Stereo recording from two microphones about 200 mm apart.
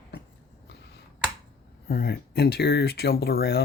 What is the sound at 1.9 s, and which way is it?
Speech, 50° left (ahead or behind).